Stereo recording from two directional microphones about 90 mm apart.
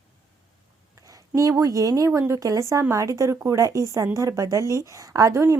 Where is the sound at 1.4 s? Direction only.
35° right (ahead or behind).